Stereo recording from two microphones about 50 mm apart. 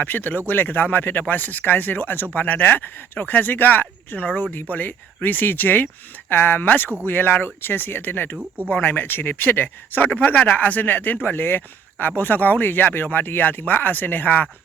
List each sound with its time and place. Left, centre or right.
0.0 s speech: left